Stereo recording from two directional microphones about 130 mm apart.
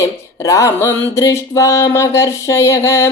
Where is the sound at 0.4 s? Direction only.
25° left (ahead or behind).